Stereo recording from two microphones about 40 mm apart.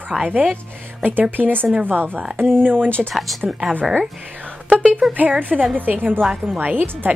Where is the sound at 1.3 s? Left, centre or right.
Right.